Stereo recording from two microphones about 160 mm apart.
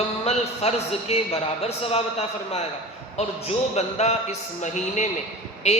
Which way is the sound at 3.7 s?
40° left (ahead or behind).